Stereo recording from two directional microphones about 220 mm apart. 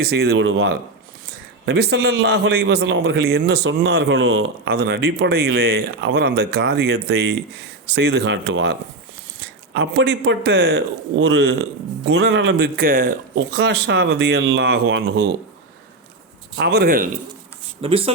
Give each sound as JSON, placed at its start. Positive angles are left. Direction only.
{"t": 0.0, "sound": "a man's voice", "side_deg": -45}
{"t": 0.3, "sound": "a man's voice", "side_deg": -60}
{"t": 9.7, "sound": "a man's voice", "side_deg": -55}
{"t": 16.6, "sound": "a man's voice", "side_deg": -45}
{"t": 17.8, "sound": "speech", "side_deg": -25}